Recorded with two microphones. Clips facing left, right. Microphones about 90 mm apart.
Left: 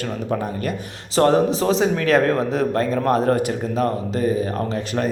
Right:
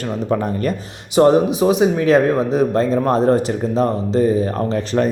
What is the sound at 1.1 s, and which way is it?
A man's voice, 15° right (ahead or behind).